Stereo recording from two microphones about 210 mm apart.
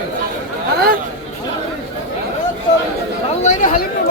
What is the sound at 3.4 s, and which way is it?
Speech, 35° left (ahead or behind).